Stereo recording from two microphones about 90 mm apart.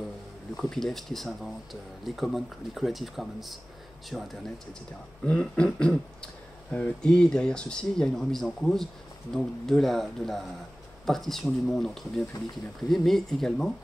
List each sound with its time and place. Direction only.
0.6 s speech: 5° left (ahead or behind)